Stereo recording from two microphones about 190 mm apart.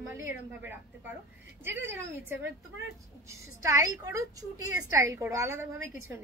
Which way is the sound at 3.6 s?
15° right (ahead or behind).